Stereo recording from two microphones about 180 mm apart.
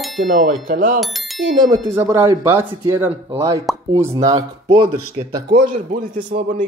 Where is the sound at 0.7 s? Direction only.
45° right (ahead or behind).